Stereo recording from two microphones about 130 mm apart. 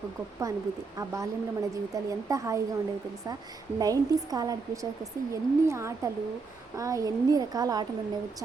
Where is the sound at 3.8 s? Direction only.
30° right (ahead or behind).